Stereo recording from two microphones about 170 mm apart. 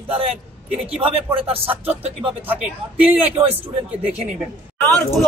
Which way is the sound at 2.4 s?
10° right (ahead or behind).